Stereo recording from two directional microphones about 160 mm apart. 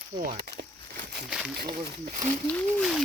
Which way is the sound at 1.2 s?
5° right (ahead or behind).